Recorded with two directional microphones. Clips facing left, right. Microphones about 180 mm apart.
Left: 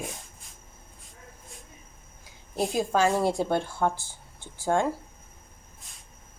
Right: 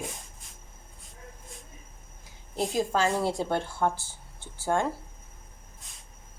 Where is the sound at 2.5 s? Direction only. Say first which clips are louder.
Left 2 dB; 15° left (ahead or behind).